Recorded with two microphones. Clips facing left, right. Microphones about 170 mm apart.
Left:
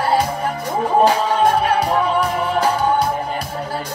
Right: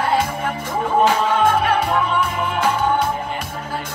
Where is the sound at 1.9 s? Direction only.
35° left (ahead or behind).